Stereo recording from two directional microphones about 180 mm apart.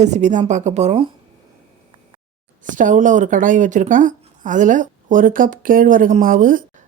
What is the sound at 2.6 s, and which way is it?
Speech, 45° right (ahead or behind).